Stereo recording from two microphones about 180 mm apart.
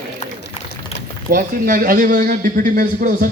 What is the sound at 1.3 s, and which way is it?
A man's voice, 50° right (ahead or behind).